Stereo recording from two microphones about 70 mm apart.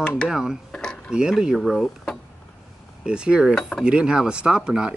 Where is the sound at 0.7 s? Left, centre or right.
Centre.